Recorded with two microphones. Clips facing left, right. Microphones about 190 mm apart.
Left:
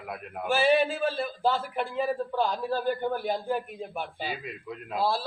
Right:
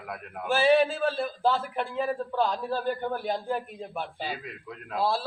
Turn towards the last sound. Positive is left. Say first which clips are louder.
# even
turn(degrees=0)  # may be behind; listen again after turning